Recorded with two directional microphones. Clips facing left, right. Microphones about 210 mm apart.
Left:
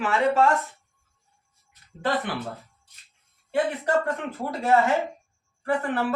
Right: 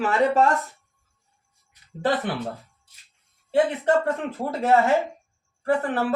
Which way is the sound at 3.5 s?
30° right (ahead or behind).